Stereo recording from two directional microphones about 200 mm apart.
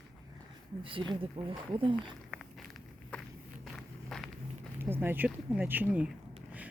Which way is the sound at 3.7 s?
Centre (ahead or behind).